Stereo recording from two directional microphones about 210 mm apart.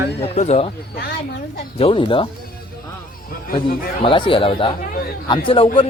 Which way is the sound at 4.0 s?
25° left (ahead or behind).